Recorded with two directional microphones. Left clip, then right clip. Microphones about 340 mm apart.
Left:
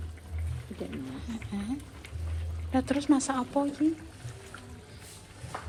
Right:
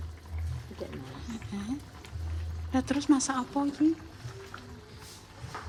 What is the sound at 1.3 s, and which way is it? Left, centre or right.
Speech, centre.